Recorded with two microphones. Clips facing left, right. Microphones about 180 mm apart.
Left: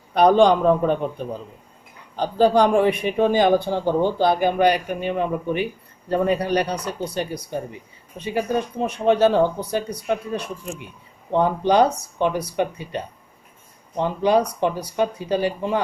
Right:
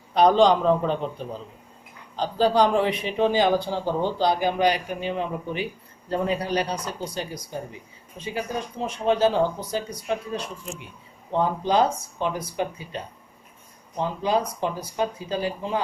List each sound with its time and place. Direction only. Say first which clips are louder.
0.1 s speech: left 3 dB; 55° left (ahead or behind)
2.1 s a man's voice: left 3 dB; 55° left (ahead or behind)